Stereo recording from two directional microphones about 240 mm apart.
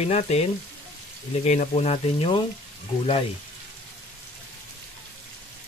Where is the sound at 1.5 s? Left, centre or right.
Left.